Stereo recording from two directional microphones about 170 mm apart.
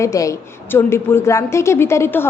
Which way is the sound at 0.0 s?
20° left (ahead or behind).